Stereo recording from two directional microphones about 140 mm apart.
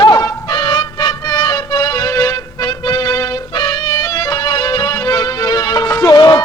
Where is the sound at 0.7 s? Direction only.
30° left (ahead or behind).